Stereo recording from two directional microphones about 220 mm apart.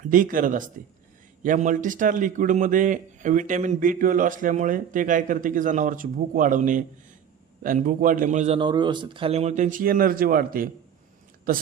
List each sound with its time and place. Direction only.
0.0 s a man's voice: 40° right (ahead or behind)